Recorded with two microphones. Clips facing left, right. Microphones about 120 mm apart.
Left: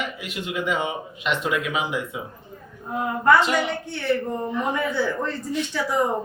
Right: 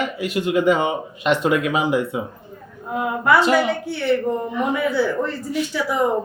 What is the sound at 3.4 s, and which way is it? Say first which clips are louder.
Speech: right 5 dB; 40° right (ahead or behind).